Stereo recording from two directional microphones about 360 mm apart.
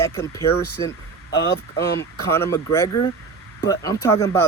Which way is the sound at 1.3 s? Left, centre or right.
Left.